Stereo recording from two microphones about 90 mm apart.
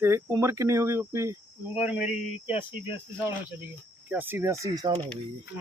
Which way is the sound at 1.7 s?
15° right (ahead or behind).